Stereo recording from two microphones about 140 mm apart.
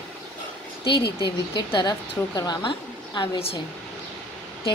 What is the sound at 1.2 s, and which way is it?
Speech, 35° left (ahead or behind).